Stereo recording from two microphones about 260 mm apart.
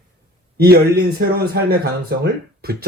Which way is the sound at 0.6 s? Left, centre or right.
Right.